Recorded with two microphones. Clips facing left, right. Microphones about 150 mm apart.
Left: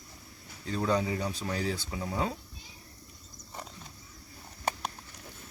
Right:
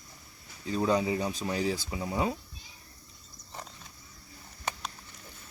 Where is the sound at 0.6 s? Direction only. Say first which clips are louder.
Right 2 dB; 15° right (ahead or behind).